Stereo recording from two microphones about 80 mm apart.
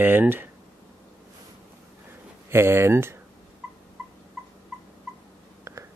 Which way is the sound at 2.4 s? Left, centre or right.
Right.